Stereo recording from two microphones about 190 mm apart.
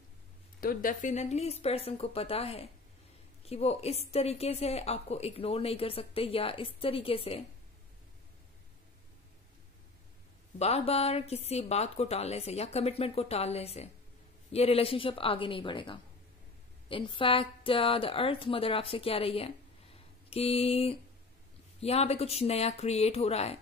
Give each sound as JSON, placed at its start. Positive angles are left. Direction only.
{"t": 0.6, "sound": "a woman's voice", "side_deg": 45}
{"t": 10.6, "sound": "a woman's voice", "side_deg": 35}